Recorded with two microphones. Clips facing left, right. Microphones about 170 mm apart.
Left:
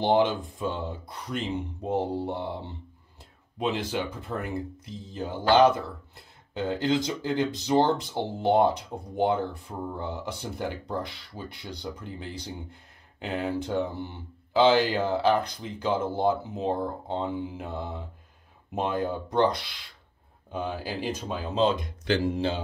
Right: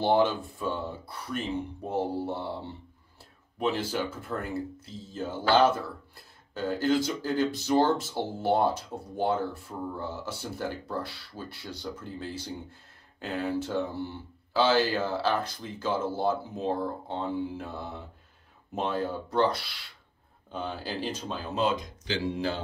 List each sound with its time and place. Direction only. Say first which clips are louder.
0.0 s speech: left 1 dB; 20° left (ahead or behind)
21.7 s speech: left 6 dB; 55° left (ahead or behind)